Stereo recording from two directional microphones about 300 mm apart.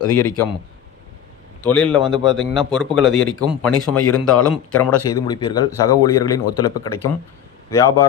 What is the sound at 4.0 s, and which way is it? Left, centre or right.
Speech, left.